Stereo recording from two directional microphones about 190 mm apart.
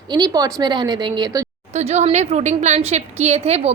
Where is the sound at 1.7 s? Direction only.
35° right (ahead or behind).